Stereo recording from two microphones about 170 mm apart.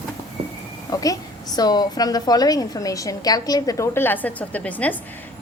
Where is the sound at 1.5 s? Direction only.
25° left (ahead or behind).